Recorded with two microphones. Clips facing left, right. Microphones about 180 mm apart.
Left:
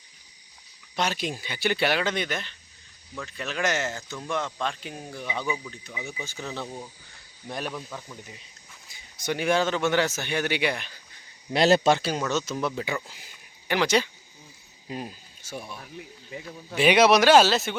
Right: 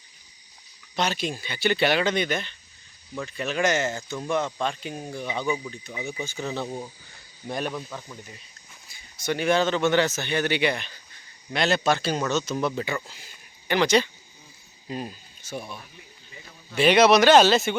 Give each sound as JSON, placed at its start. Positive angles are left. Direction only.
{"t": 0.9, "sound": "a man's voice", "side_deg": 10}
{"t": 6.7, "sound": "speech", "side_deg": -20}
{"t": 7.4, "sound": "speech", "side_deg": 0}
{"t": 8.9, "sound": "a man's voice", "side_deg": 15}
{"t": 11.5, "sound": "speech", "side_deg": 35}
{"t": 12.3, "sound": "a man's voice", "side_deg": 10}
{"t": 16.7, "sound": "a man's voice", "side_deg": 10}